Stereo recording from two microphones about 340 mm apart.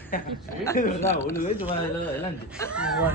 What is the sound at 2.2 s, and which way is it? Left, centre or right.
Speech, centre.